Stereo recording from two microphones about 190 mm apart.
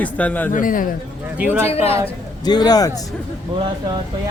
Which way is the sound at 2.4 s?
20° left (ahead or behind).